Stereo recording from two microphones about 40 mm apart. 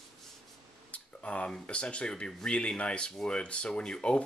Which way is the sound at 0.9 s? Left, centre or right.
Left.